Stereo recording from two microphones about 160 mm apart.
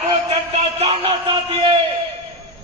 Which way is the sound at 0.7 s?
40° right (ahead or behind).